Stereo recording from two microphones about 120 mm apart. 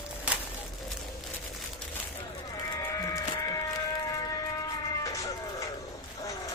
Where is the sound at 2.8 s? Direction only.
25° left (ahead or behind).